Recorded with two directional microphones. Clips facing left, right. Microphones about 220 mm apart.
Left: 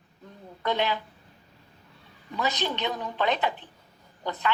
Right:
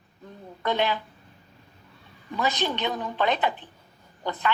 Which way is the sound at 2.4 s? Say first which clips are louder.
Right 2 dB; 50° right (ahead or behind).